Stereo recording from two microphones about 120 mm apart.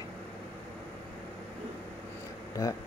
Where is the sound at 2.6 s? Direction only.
30° left (ahead or behind).